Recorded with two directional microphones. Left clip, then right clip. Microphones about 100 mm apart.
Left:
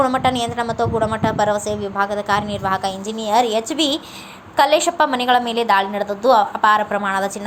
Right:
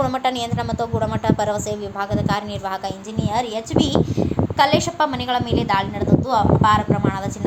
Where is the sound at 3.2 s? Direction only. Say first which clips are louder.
Left 6 dB; 60° left (ahead or behind).